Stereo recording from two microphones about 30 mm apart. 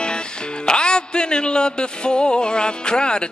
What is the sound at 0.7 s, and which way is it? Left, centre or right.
Music, left.